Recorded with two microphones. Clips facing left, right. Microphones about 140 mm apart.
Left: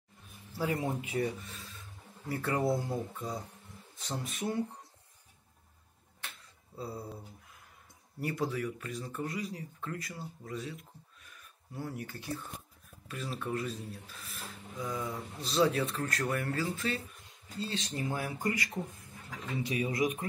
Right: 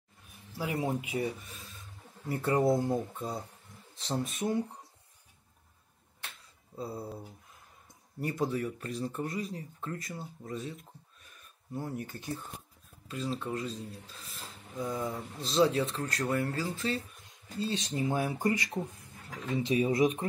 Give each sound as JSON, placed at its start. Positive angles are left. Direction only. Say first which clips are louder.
{"t": 0.6, "sound": "speech", "louder": "right 1 dB", "side_deg": -15}
{"t": 2.2, "sound": "speech", "louder": "right 4 dB", "side_deg": -25}
{"t": 6.8, "sound": "speech", "louder": "right 2 dB", "side_deg": -20}
{"t": 8.3, "sound": "speech", "louder": "right 2 dB", "side_deg": -25}
{"t": 16.7, "sound": "speech", "louder": "right 2 dB", "side_deg": -30}
{"t": 17.6, "sound": "speech", "louder": "right 4 dB", "side_deg": -20}